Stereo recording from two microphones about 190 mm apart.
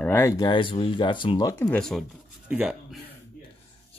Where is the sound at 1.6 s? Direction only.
5° left (ahead or behind).